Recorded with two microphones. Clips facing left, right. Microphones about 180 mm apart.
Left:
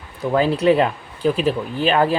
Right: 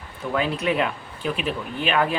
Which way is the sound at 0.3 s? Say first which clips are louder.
Left 7 dB; 35° left (ahead or behind).